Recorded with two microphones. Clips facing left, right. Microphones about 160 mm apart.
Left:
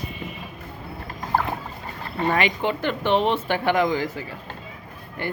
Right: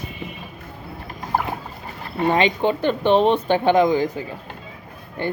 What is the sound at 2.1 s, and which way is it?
Speech, 20° right (ahead or behind).